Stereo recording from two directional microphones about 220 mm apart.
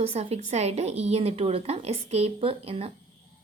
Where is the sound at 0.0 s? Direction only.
30° right (ahead or behind).